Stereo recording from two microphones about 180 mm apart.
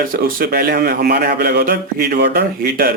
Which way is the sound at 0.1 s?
55° right (ahead or behind).